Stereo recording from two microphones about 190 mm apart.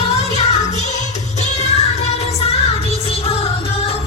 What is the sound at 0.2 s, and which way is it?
Music, 35° left (ahead or behind).